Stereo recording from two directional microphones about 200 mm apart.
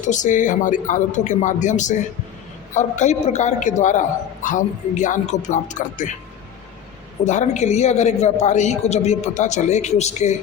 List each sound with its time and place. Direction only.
0.0 s a man's voice: 40° left (ahead or behind)
7.3 s a man's voice: 35° left (ahead or behind)